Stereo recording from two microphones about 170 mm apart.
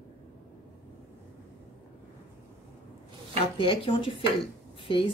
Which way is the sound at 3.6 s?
30° left (ahead or behind).